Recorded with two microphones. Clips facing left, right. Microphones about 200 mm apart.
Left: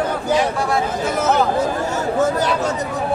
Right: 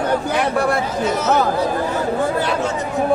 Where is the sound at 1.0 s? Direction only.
50° left (ahead or behind).